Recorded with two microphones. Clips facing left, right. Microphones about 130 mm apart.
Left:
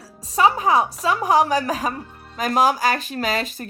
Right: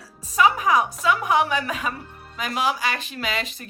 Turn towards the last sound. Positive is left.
turn(degrees=40)  # may be behind; listen again after turning